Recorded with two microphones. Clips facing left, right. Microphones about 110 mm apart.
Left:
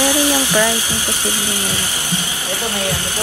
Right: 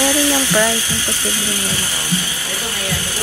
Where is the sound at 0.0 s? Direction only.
15° left (ahead or behind).